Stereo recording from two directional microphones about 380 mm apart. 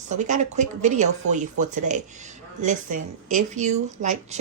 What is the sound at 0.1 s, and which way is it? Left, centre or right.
A woman's voice, centre.